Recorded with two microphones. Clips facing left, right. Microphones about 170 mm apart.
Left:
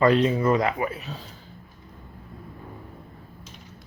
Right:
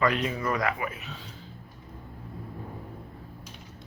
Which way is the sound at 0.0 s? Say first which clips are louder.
Left 7 dB; 30° left (ahead or behind).